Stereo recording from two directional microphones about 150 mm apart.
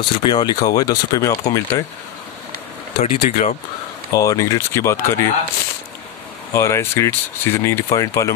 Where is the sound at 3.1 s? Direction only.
45° left (ahead or behind).